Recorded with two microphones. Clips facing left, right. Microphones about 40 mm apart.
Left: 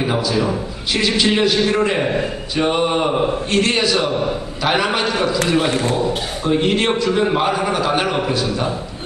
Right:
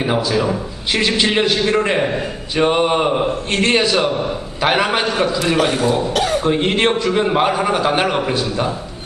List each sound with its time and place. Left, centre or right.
0.0 s a man's voice: centre
3.5 s a man's voice: right
6.4 s a man's voice: right
7.1 s a man's voice: centre